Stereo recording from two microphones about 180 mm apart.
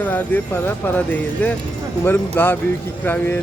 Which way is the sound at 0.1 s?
10° left (ahead or behind).